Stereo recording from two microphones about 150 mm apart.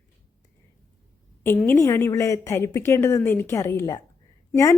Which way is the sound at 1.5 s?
15° left (ahead or behind).